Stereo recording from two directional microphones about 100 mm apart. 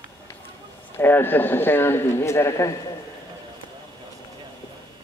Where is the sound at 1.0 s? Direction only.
20° left (ahead or behind).